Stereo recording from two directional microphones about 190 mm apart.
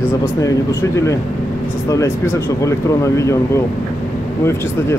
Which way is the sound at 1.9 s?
15° left (ahead or behind).